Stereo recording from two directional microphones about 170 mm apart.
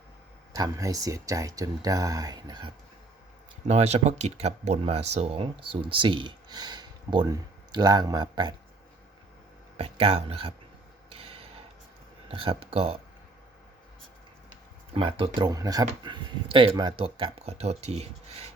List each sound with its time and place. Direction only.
0.5 s speech: 20° right (ahead or behind)
3.7 s speech: 40° right (ahead or behind)
9.7 s speech: 35° right (ahead or behind)
11.1 s a sound: 35° right (ahead or behind)
12.3 s speech: 30° right (ahead or behind)
14.9 s speech: 30° right (ahead or behind)